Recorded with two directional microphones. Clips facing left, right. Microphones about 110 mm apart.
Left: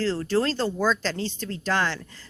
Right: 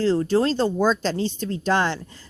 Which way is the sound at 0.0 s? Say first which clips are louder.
Right 4 dB; 15° right (ahead or behind).